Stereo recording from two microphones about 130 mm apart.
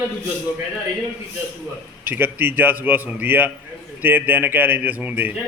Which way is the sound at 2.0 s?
15° right (ahead or behind).